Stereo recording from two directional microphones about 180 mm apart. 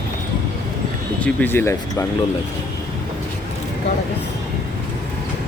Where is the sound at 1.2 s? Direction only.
10° left (ahead or behind).